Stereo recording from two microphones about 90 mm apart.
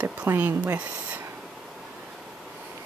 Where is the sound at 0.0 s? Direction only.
20° right (ahead or behind).